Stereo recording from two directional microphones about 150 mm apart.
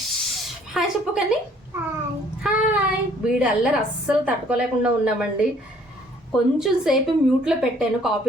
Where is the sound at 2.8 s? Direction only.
5° right (ahead or behind).